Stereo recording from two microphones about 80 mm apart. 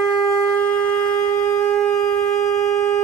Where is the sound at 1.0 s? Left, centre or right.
Left.